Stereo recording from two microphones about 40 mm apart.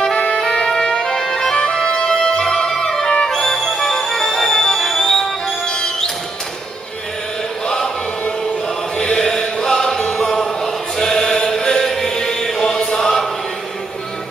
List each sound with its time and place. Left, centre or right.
0.1 s music: left
7.6 s choir: centre
8.9 s chant: left
9.2 s chant: centre